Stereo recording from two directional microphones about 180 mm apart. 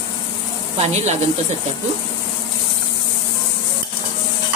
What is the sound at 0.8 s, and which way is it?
Speech, 40° right (ahead or behind).